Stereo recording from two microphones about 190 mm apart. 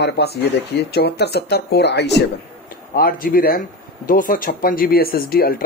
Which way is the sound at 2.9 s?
50° left (ahead or behind).